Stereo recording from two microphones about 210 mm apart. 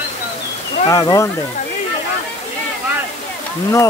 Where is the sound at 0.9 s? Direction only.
15° left (ahead or behind).